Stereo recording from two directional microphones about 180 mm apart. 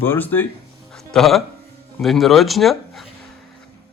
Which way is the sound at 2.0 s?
Centre (ahead or behind).